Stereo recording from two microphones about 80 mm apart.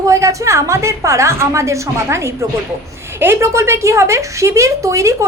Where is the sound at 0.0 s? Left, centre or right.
Right.